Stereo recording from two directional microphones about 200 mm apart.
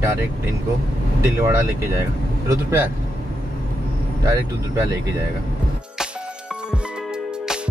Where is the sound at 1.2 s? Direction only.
15° right (ahead or behind).